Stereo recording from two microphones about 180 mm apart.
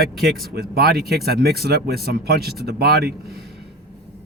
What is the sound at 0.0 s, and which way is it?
Speech, 65° right (ahead or behind).